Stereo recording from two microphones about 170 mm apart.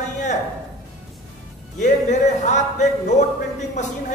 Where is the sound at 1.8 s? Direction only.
45° left (ahead or behind).